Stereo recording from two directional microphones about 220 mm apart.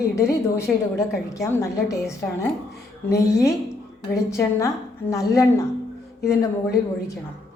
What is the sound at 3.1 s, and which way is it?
A woman's voice, 15° left (ahead or behind).